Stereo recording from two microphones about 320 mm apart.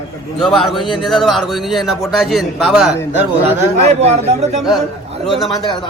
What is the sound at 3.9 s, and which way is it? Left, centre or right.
Speech, centre.